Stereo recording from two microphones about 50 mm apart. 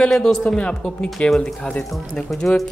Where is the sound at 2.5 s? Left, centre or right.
Left.